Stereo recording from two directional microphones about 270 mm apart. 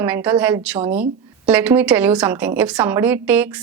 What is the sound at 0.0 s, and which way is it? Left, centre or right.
A woman's voice, centre.